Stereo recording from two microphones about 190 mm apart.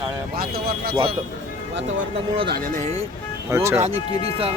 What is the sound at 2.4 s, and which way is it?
Speech, 50° right (ahead or behind).